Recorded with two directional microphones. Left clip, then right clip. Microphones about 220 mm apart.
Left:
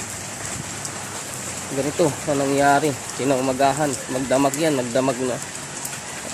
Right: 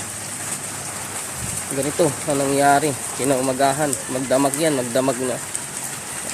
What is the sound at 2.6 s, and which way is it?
Speech, centre (ahead or behind).